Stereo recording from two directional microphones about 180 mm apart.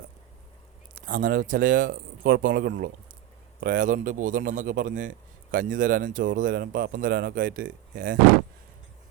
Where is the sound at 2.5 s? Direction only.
65° right (ahead or behind).